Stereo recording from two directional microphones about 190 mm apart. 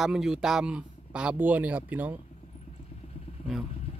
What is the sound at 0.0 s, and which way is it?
Speech, centre (ahead or behind).